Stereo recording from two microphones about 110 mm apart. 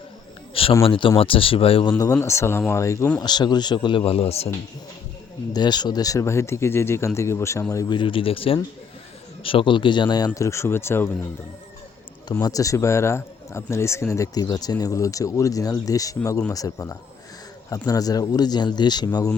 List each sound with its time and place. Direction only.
0.8 s speech: 50° left (ahead or behind)
1.9 s speech: 30° left (ahead or behind)
3.2 s speech: 40° left (ahead or behind); by 4.4 s 65° left (ahead or behind)
5.5 s speech: 40° left (ahead or behind)
7.9 s a man's voice: 50° left (ahead or behind); by 11.1 s 20° left (ahead or behind)
12.3 s a man's voice: 35° left (ahead or behind)